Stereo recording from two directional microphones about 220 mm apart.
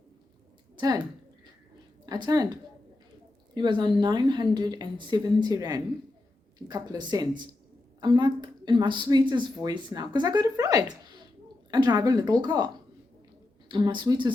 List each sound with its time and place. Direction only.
0.8 s speech: 20° right (ahead or behind)
2.0 s a woman's voice: 20° right (ahead or behind)